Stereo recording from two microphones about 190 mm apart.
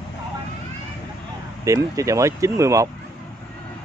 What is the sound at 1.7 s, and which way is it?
Speech, 15° right (ahead or behind).